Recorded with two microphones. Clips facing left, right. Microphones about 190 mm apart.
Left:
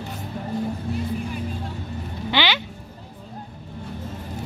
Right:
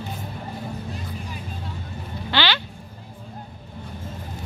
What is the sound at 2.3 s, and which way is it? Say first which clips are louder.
Music: left 1 dB; 15° left (ahead or behind).